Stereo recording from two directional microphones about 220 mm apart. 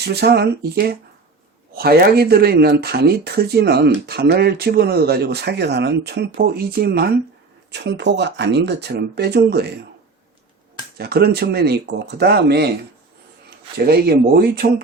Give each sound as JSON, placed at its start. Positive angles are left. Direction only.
{"t": 0.0, "sound": "speech", "side_deg": -45}
{"t": 10.9, "sound": "speech", "side_deg": -45}
{"t": 13.7, "sound": "speech", "side_deg": -45}